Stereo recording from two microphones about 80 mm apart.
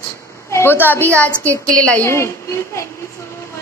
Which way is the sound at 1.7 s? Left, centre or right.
Centre.